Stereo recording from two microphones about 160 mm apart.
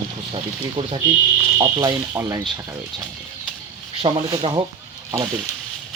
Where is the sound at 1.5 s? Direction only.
25° right (ahead or behind).